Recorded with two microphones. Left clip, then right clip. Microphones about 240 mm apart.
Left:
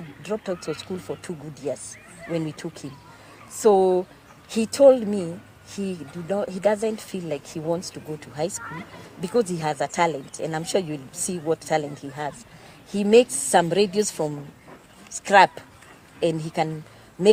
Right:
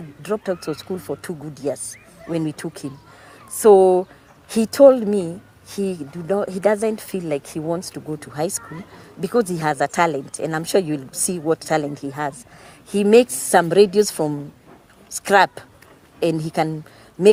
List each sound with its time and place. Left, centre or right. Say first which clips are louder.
0.2 s speech: right 5 dB; right